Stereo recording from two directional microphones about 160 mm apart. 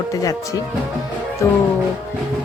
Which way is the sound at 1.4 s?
20° left (ahead or behind).